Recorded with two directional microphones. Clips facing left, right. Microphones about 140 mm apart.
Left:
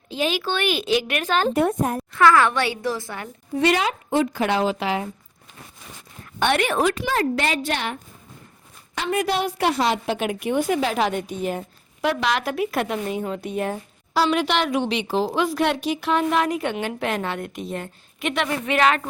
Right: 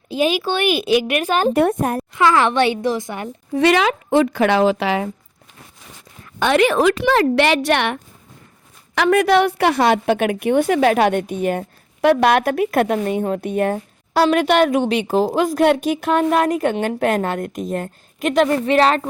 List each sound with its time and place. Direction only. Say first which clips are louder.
0.1 s a woman's voice: right 5 dB; 15° right (ahead or behind)
1.5 s speech: right 4 dB; 65° right (ahead or behind)
2.1 s a woman's voice: right 1 dB; 20° right (ahead or behind)
3.6 s speech: right 5 dB; 80° right
6.6 s a woman's voice: right 6 dB; 90° right; by 7.9 s 75° right (ahead or behind)
9.0 s a woman's voice: right 9 dB; 75° right (ahead or behind); by 19.0 s 35° right (ahead or behind)